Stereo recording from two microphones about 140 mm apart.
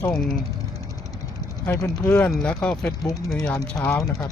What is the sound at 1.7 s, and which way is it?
Speech, 15° left (ahead or behind).